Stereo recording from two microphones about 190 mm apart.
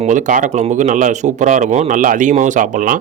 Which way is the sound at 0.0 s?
40° right (ahead or behind).